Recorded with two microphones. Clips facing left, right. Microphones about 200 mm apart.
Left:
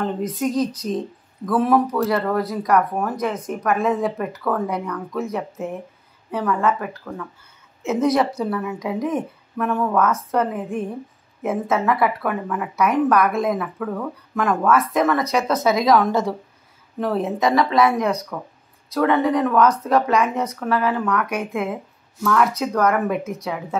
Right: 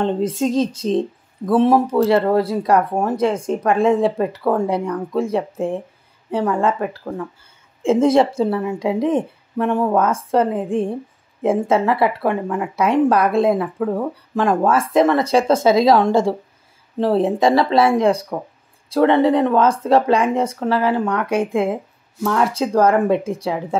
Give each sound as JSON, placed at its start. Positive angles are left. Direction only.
{"t": 0.0, "sound": "speech", "side_deg": -30}